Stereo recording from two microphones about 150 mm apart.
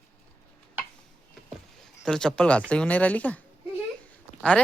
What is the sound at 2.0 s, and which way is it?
Speech, 5° left (ahead or behind).